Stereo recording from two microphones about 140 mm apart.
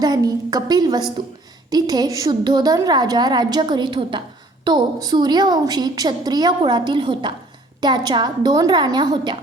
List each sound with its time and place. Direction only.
0.0 s a woman's voice: 25° right (ahead or behind)